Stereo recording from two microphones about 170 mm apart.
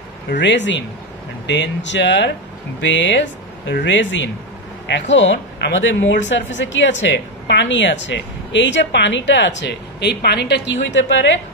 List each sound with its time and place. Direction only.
0.3 s a woman's voice: 90° left